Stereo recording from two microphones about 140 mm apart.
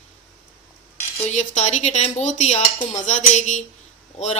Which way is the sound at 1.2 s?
55° left (ahead or behind).